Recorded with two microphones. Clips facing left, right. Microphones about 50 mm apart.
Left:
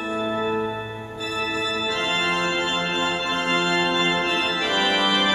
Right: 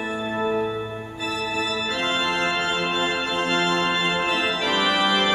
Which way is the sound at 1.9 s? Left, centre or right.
Centre.